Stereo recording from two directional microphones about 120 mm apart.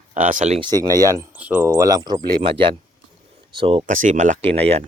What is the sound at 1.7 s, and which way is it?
Speech, 30° right (ahead or behind).